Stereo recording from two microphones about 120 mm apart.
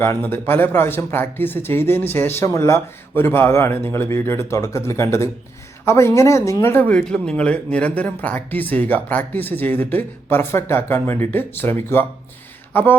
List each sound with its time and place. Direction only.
0.0 s speech: 20° left (ahead or behind)